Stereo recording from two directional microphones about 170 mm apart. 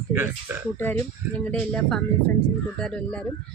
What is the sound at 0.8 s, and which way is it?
Speech, 10° left (ahead or behind).